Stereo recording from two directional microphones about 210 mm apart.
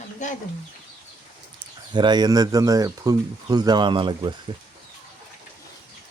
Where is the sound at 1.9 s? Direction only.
20° right (ahead or behind).